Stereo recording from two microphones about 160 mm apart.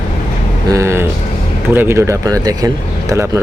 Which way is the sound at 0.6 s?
20° right (ahead or behind).